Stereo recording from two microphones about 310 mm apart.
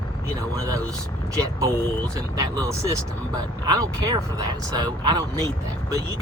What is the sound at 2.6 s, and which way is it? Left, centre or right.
Speech, centre.